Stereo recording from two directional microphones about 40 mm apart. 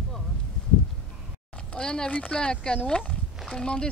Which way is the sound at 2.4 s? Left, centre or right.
Left.